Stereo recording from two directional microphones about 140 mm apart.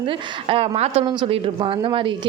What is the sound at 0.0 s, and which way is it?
A woman's voice, 40° right (ahead or behind).